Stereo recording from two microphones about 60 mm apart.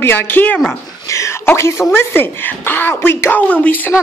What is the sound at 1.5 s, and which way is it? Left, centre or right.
Speech, left.